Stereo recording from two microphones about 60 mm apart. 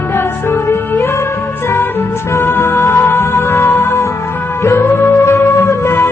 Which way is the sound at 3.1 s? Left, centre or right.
Left.